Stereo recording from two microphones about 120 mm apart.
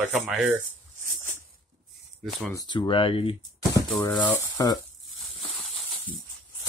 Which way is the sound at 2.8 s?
45° left (ahead or behind).